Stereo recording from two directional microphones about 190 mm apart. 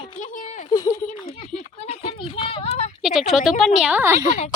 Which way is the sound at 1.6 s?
35° left (ahead or behind).